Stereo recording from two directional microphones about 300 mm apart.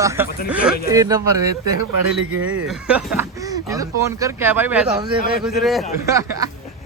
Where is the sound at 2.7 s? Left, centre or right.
Centre.